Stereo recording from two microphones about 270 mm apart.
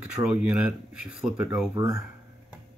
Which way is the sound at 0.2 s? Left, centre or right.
Centre.